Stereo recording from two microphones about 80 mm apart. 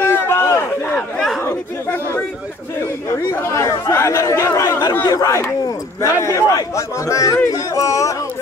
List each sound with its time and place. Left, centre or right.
0.0 s a sound: left
0.8 s chatter: centre
3.3 s speech: left
5.0 s speech: left